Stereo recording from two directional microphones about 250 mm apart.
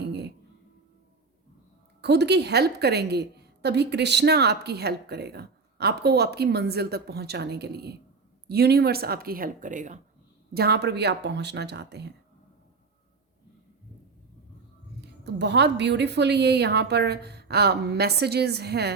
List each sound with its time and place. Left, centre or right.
0.1 s a sound: right
2.0 s a woman's voice: right
15.0 s a woman's voice: right